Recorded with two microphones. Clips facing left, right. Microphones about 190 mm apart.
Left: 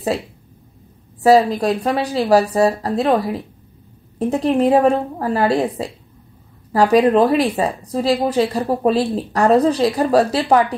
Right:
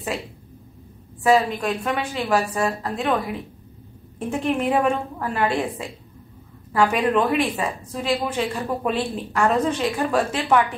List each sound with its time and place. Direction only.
1.2 s a woman's voice: 35° left (ahead or behind)